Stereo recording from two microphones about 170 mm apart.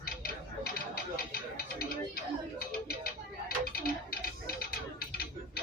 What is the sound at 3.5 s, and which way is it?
Tick-tock, 60° left (ahead or behind).